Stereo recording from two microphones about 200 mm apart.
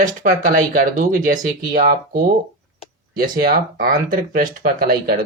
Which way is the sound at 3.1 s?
45° right (ahead or behind).